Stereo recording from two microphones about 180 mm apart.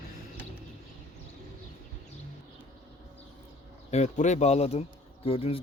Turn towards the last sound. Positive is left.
turn(degrees=30)  # may be behind; listen again after turning